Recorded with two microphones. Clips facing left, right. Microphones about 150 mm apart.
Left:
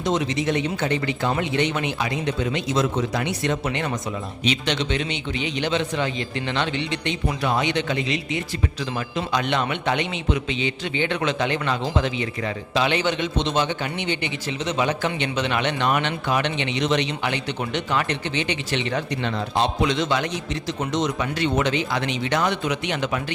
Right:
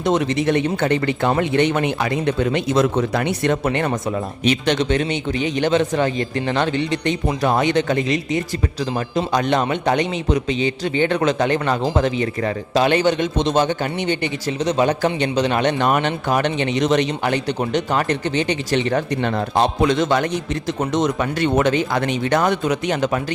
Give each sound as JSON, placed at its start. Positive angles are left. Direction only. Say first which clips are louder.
{"t": 0.0, "sound": "a man's voice", "louder": "right 5 dB", "side_deg": -55}